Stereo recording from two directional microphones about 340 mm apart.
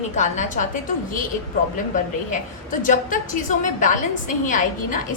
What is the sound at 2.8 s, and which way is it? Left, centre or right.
A woman's voice, left.